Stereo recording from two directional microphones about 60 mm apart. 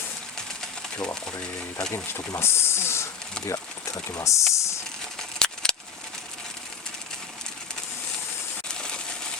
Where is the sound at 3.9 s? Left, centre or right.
Left.